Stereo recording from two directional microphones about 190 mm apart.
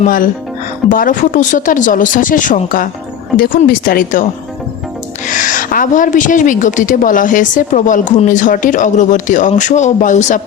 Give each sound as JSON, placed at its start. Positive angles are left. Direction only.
{"t": 0.0, "sound": "a woman's voice", "side_deg": 45}
{"t": 5.3, "sound": "a woman's voice", "side_deg": 45}